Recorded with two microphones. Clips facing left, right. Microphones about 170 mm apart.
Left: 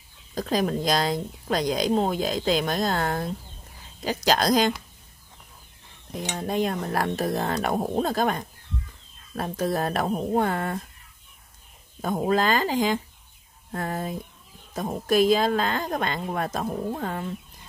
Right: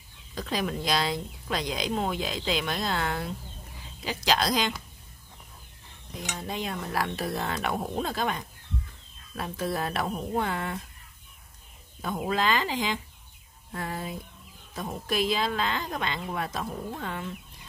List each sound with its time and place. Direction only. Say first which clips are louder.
0.3 s a woman's voice: left 6 dB; 40° left (ahead or behind)
6.3 s a woman's voice: left 8 dB; 50° left (ahead or behind)
12.0 s a woman's voice: left 5 dB; 40° left (ahead or behind)